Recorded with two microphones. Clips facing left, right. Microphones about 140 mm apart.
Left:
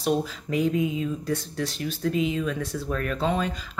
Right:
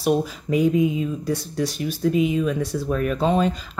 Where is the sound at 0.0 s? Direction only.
10° right (ahead or behind).